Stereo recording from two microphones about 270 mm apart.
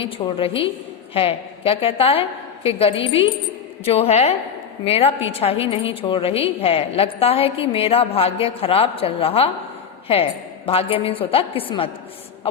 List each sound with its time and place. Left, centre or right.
0.0 s a woman's voice: centre
10.7 s a woman's voice: left